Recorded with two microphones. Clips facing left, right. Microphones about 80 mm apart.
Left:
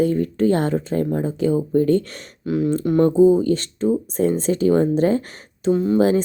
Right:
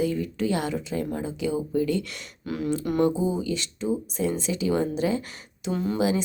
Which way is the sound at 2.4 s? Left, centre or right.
Left.